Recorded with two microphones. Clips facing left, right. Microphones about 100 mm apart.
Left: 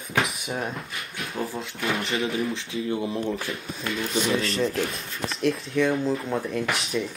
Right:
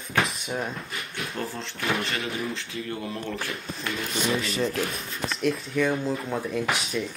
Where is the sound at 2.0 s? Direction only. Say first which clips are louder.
Left 4 dB; 30° left (ahead or behind).